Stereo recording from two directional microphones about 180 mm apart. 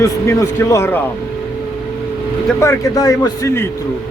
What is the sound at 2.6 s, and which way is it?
Speech, 15° left (ahead or behind).